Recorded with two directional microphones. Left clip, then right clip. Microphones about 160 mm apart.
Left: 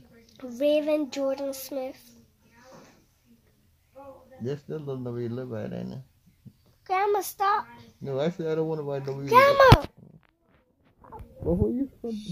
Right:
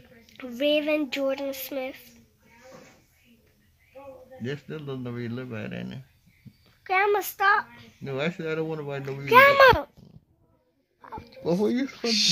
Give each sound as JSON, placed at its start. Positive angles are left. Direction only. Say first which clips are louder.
{"t": 0.6, "sound": "speech", "louder": "even", "side_deg": 10}
{"t": 4.5, "sound": "speech", "louder": "left 2 dB", "side_deg": 30}
{"t": 6.8, "sound": "a child's voice", "louder": "right 2 dB", "side_deg": 5}
{"t": 8.0, "sound": "speech", "louder": "left 1 dB", "side_deg": 25}
{"t": 9.0, "sound": "speech", "louder": "right 2 dB", "side_deg": 5}
{"t": 11.4, "sound": "speech", "louder": "right 2 dB", "side_deg": -10}
{"t": 11.7, "sound": "speech", "louder": "right 7 dB", "side_deg": 10}